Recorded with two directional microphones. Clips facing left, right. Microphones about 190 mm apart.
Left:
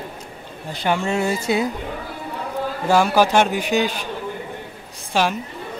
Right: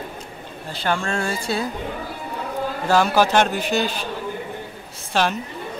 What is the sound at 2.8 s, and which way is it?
A man's voice, 10° left (ahead or behind).